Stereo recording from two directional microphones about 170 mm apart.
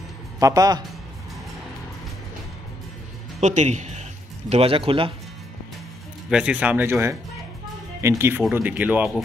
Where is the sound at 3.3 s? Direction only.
40° right (ahead or behind).